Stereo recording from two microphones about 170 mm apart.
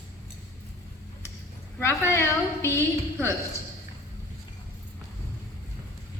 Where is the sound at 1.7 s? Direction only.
15° left (ahead or behind).